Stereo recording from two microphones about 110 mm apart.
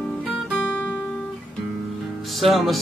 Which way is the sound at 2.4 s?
Centre (ahead or behind).